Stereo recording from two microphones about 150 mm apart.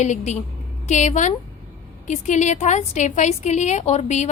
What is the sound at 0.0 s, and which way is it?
A woman's voice, 50° left (ahead or behind).